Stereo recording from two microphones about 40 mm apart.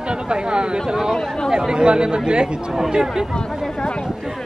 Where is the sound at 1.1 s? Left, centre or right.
Centre.